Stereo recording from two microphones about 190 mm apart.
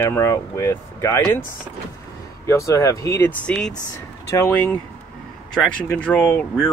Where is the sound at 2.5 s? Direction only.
15° left (ahead or behind).